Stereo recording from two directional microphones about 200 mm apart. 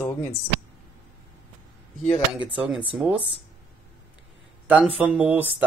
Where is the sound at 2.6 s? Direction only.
5° right (ahead or behind).